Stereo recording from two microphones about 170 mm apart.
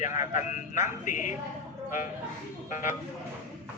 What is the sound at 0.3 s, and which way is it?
A man's voice, 45° left (ahead or behind).